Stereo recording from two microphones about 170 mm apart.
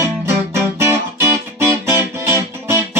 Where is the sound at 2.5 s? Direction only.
15° right (ahead or behind).